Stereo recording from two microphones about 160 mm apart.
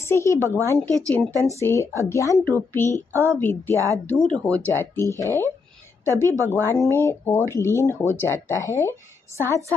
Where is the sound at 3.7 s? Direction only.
20° right (ahead or behind).